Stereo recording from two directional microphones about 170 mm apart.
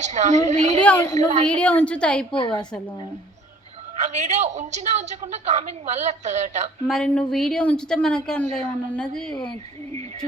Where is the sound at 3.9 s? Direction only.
45° right (ahead or behind).